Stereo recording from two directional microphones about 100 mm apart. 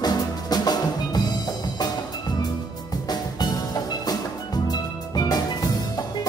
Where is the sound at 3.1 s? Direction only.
45° left (ahead or behind).